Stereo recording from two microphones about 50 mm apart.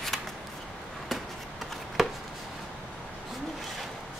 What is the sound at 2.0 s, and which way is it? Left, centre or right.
Chopping, centre.